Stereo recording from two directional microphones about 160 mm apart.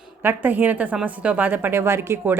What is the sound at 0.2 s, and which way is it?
A woman's voice, 10° right (ahead or behind).